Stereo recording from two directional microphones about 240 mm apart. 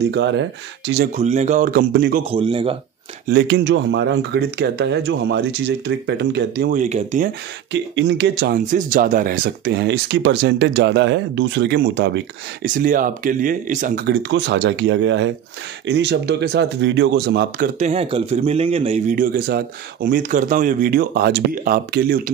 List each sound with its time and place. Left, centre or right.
0.0 s speech: right
1.1 s speech: right
2.3 s speech: right
3.3 s speech: right
7.7 s speech: right
12.6 s speech: right
17.7 s speech: right